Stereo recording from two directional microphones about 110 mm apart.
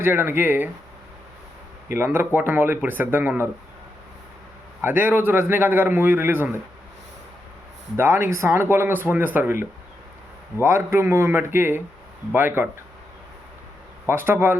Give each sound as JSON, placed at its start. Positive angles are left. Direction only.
{"t": 0.0, "sound": "a man's voice", "side_deg": -20}
{"t": 2.0, "sound": "speech", "side_deg": -20}
{"t": 4.8, "sound": "a man's voice", "side_deg": -15}
{"t": 7.9, "sound": "a man's voice", "side_deg": -20}
{"t": 14.1, "sound": "a man's voice", "side_deg": -20}